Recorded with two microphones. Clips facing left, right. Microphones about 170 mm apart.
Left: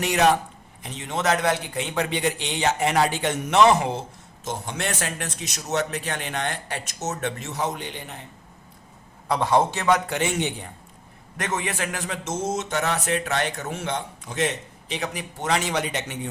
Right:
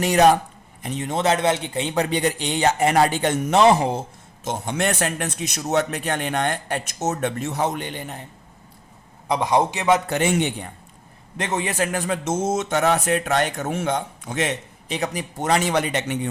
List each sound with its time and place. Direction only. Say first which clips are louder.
0.0 s speech: right 5 dB; 40° right (ahead or behind)
0.8 s a man's voice: right 9 dB; 50° right (ahead or behind)
1.1 s a man's voice: right 2 dB; 30° right (ahead or behind)
2.0 s a man's voice: right 3 dB; 45° right (ahead or behind)
3.6 s speech: right 1 dB; 30° right (ahead or behind)
4.4 s a man's voice: right 5 dB; 60° right (ahead or behind)
9.3 s a man's voice: right 1 dB; 15° right (ahead or behind)
10.1 s a man's voice: right 4 dB; 55° right (ahead or behind)
11.3 s a man's voice: right 4 dB; 30° right (ahead or behind); by 14.5 s 60° right (ahead or behind)
14.8 s a man's voice: right 4 dB; 45° right (ahead or behind)